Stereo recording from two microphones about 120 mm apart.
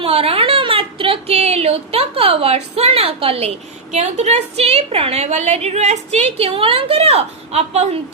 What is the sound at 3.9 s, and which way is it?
A woman's voice, 70° right (ahead or behind).